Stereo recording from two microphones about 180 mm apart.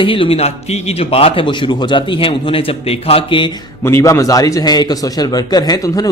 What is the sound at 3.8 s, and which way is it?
Speech, 15° left (ahead or behind).